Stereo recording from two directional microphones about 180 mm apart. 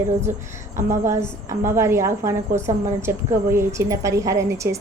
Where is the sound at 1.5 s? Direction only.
15° right (ahead or behind).